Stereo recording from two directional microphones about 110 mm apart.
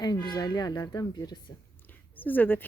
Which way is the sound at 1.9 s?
15° left (ahead or behind).